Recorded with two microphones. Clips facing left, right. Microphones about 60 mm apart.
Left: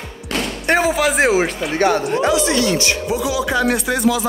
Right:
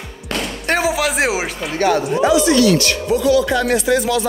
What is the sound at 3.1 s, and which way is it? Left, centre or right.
Speech, centre.